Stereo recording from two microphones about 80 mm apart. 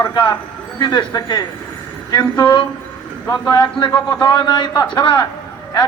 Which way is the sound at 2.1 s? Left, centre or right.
Left.